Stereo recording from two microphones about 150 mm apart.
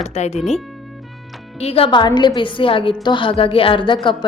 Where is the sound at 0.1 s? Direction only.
50° left (ahead or behind).